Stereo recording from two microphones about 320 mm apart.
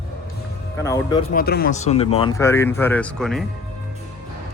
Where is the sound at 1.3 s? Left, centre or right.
Left; by 3.4 s centre.